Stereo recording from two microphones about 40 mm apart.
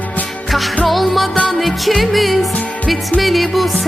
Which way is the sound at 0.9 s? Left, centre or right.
Centre.